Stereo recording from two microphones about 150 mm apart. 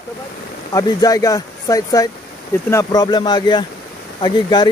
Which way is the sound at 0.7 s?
25° left (ahead or behind).